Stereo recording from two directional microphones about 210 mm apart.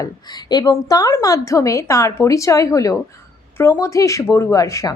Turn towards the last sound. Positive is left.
turn(degrees=15)  # may be behind; listen again after turning